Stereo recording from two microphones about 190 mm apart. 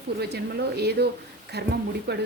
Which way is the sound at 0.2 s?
60° right (ahead or behind).